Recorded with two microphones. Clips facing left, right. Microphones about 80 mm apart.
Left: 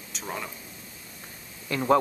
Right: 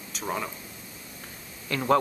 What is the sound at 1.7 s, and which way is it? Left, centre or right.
Speech, left.